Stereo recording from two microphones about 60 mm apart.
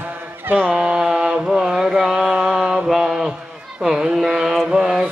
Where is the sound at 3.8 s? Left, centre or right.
Centre.